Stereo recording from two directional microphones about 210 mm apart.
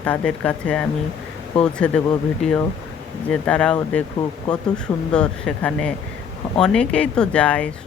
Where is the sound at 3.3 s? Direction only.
5° left (ahead or behind).